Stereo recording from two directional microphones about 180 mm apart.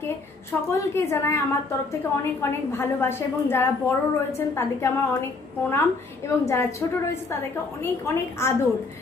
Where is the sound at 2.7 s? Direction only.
15° left (ahead or behind).